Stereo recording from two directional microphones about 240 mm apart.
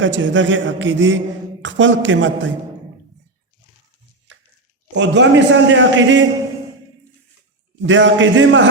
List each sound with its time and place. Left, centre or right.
0.0 s a man's voice: right
4.9 s a man's voice: right
7.8 s a man's voice: right